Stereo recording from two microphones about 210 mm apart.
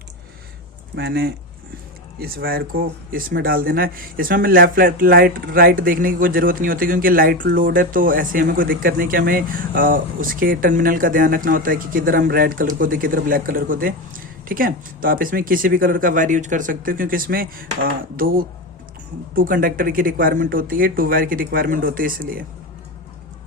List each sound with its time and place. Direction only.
0.9 s speech: 50° right (ahead or behind)